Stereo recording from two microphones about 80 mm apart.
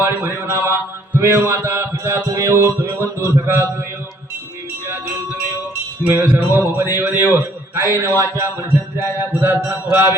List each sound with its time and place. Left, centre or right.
0.0 s a man's voice: right
1.5 s mantra: right
6.0 s a man's voice: right
8.1 s mantra: right
9.3 s a man's voice: right